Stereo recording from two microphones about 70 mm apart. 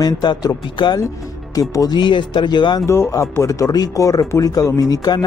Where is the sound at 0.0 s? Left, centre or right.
Left.